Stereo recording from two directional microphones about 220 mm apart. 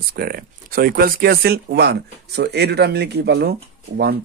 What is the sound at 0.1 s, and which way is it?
Speech, 45° right (ahead or behind).